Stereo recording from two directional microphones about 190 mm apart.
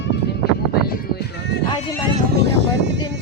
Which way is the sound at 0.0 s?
65° left (ahead or behind).